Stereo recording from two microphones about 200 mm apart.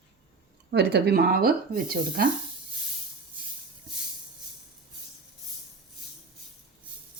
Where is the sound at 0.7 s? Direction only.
55° right (ahead or behind).